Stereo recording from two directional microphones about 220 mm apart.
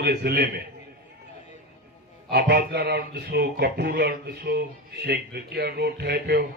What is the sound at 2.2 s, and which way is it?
Speech, 45° right (ahead or behind).